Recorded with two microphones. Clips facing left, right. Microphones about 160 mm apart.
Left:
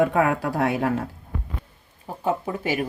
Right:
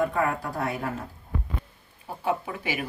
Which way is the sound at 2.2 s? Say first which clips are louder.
Left 4 dB; 40° left (ahead or behind).